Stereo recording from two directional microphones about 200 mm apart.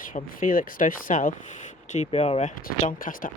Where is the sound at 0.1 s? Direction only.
40° left (ahead or behind).